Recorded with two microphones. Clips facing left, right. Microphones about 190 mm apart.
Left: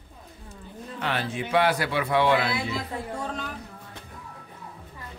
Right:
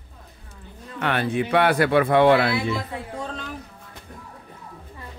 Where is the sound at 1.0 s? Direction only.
60° right (ahead or behind).